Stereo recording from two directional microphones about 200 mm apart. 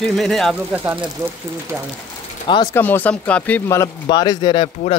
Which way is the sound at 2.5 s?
20° left (ahead or behind).